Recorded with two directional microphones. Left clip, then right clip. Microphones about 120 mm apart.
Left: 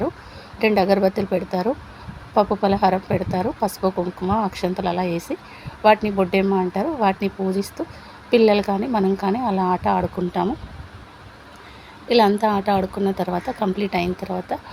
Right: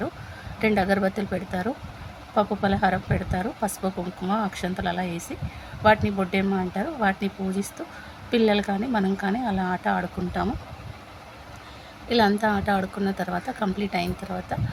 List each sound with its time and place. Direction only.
0.6 s a woman's voice: 20° left (ahead or behind)
12.0 s a woman's voice: 20° left (ahead or behind)